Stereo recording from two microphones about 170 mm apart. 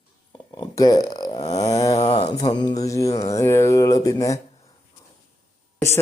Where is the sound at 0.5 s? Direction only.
25° left (ahead or behind).